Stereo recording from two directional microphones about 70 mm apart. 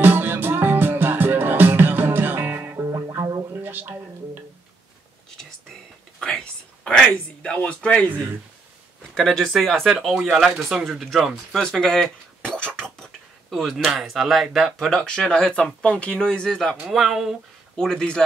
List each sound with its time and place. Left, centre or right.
0.0 s music: right
3.6 s a sound: right
6.1 s a sound: centre
9.1 s speech: centre
11.6 s speech: centre
14.9 s speech: centre
16.9 s speech: centre
17.7 s speech: centre